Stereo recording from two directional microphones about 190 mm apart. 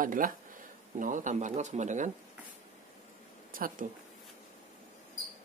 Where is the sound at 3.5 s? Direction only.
45° right (ahead or behind).